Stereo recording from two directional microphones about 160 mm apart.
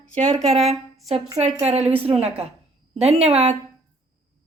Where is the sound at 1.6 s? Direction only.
40° right (ahead or behind).